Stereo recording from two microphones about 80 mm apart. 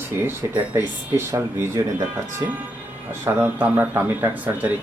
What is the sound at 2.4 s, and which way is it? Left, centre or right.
Speech, right.